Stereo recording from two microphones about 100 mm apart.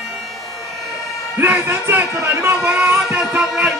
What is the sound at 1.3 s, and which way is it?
Speech, 20° right (ahead or behind).